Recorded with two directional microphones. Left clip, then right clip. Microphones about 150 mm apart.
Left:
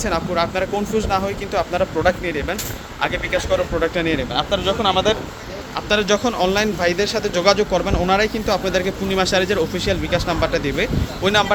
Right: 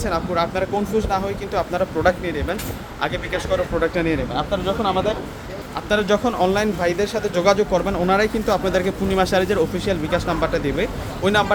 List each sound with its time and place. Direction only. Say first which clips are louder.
0.0 s speech: left 1 dB; centre (ahead or behind)
4.4 s speech: left 3 dB; 15° left (ahead or behind)
5.9 s speech: left 1 dB; 5° right (ahead or behind)